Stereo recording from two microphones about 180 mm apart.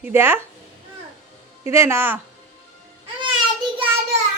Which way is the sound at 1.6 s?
15° right (ahead or behind).